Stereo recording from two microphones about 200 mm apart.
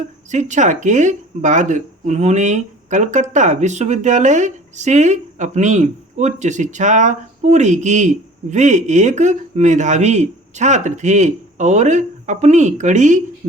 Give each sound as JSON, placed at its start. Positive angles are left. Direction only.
{"t": 0.3, "sound": "speech", "side_deg": -35}